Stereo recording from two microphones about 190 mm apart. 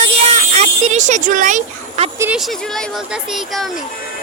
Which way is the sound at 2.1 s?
5° right (ahead or behind).